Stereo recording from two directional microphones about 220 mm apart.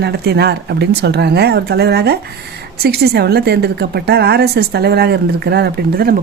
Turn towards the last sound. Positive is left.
turn(degrees=-45)  # may be behind; listen again after turning